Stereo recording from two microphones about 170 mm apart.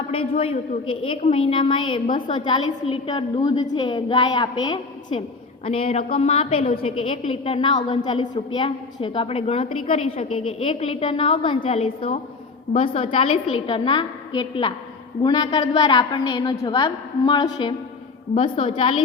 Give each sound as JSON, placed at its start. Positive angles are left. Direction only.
{"t": 0.1, "sound": "a woman's voice", "side_deg": 35}